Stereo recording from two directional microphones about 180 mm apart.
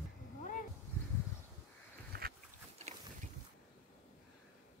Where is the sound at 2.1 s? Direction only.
55° right (ahead or behind).